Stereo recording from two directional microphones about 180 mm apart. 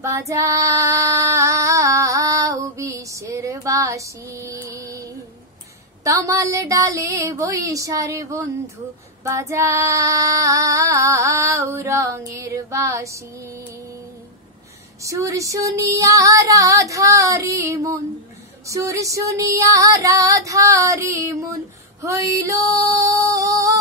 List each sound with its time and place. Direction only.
0.0 s child singing: 15° right (ahead or behind)
4.6 s music: 15° right (ahead or behind)
6.0 s child singing: 20° right (ahead or behind)
15.0 s child singing: 15° right (ahead or behind)
22.0 s music: 15° right (ahead or behind)